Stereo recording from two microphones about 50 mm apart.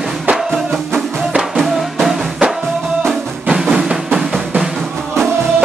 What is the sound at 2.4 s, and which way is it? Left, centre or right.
Music, right.